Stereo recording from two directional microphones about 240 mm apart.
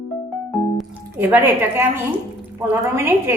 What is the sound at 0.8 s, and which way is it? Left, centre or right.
A woman's voice, centre.